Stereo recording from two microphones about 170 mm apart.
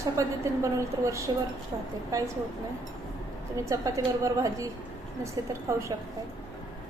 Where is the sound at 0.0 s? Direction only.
20° right (ahead or behind).